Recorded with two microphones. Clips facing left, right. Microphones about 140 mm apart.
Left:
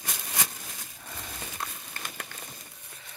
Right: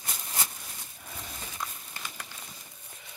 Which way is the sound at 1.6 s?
60° left (ahead or behind).